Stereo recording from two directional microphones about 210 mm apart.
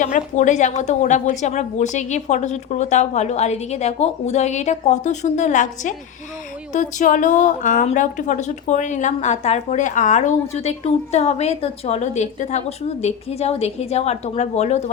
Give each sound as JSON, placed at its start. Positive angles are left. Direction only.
{"t": 0.0, "sound": "a woman's voice", "side_deg": 35}